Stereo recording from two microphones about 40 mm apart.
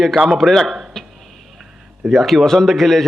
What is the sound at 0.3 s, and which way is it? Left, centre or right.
Speech, centre.